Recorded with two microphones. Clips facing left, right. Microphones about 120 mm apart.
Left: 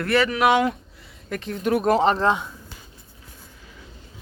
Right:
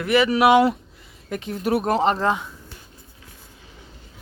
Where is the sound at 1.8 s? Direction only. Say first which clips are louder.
Left 4 dB; 40° right (ahead or behind).